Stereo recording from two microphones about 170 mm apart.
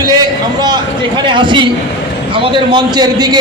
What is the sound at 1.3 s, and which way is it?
A man's voice, 30° right (ahead or behind).